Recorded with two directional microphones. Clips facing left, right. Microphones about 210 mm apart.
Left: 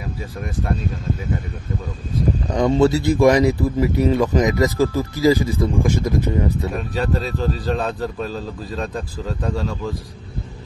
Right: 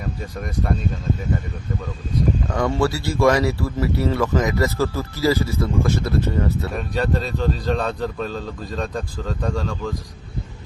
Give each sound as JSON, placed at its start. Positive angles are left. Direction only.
{"t": 2.5, "sound": "speech", "side_deg": 20}
{"t": 6.8, "sound": "speech", "side_deg": 0}